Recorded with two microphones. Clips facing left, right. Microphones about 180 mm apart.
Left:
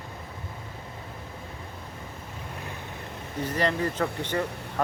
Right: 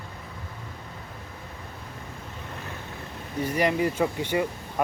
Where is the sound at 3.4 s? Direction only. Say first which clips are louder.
Right 3 dB; 10° right (ahead or behind).